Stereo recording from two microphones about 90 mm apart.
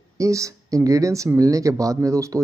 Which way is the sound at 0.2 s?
35° right (ahead or behind).